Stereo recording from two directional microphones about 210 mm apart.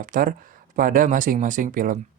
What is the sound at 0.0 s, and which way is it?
Speech, 40° right (ahead or behind).